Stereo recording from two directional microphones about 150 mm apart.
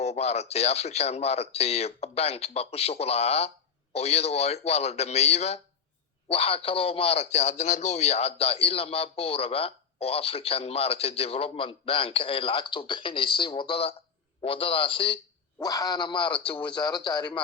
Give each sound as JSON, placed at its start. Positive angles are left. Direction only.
{"t": 0.0, "sound": "speech", "side_deg": 45}
{"t": 15.5, "sound": "speech", "side_deg": 25}